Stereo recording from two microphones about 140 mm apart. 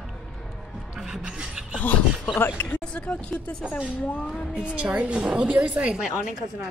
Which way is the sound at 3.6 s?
5° right (ahead or behind).